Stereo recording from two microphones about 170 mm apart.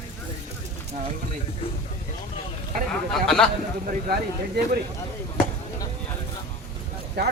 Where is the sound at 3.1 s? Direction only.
5° left (ahead or behind).